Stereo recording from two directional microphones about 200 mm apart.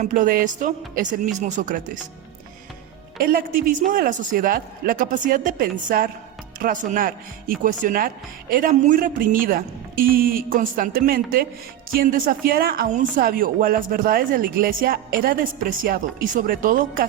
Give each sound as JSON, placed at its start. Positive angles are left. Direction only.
{"t": 0.0, "sound": "speech", "side_deg": -40}
{"t": 3.2, "sound": "a woman's voice", "side_deg": -45}